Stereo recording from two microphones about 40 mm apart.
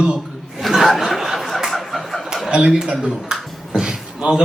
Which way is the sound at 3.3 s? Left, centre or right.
Centre.